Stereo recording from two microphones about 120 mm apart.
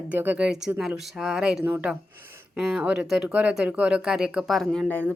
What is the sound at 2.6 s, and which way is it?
Speech, 5° right (ahead or behind).